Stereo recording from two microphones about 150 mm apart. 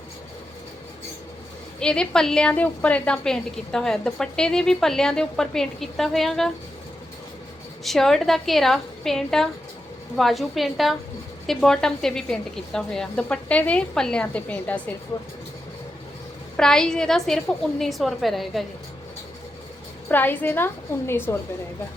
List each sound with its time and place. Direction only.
1.8 s a woman's voice: 5° left (ahead or behind)
7.9 s a woman's voice: 5° left (ahead or behind)
16.6 s a woman's voice: 5° left (ahead or behind)
20.1 s a woman's voice: 10° left (ahead or behind)